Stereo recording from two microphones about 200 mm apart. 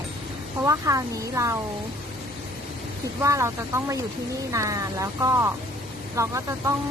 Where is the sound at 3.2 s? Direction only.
15° right (ahead or behind).